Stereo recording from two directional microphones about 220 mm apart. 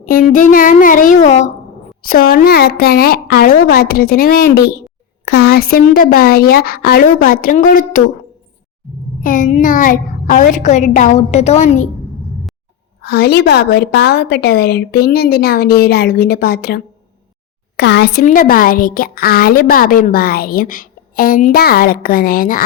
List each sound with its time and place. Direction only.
0.0 s a woman's voice: 40° left (ahead or behind)
9.2 s a woman's voice: 35° left (ahead or behind)
13.0 s a woman's voice: 50° left (ahead or behind)